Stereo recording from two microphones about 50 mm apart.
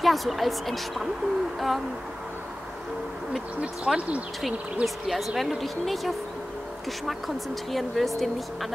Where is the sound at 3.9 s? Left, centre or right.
Centre.